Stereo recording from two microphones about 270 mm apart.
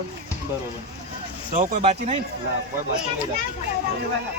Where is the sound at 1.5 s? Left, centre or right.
Right.